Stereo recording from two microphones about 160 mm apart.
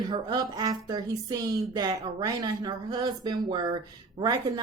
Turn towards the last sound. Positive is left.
turn(degrees=-20)  # may be behind; listen again after turning